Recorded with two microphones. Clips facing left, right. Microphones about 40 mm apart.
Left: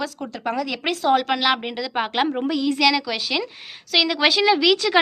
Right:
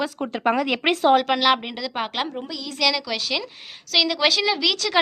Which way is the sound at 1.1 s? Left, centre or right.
Centre.